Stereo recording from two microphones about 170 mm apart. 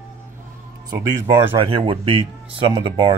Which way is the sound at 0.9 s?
25° right (ahead or behind).